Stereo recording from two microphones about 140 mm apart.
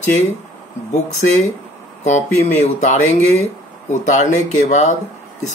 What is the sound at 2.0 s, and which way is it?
Speech, 55° left (ahead or behind).